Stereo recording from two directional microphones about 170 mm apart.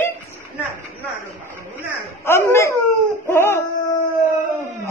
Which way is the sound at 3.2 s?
15° left (ahead or behind).